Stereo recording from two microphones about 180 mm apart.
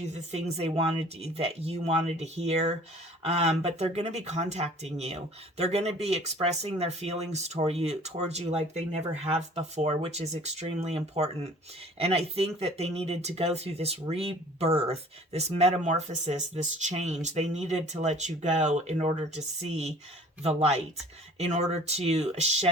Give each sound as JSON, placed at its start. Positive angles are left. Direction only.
{"t": 0.1, "sound": "speech", "side_deg": -35}